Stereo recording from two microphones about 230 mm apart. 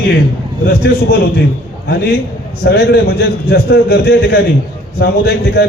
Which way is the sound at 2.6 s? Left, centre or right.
Left.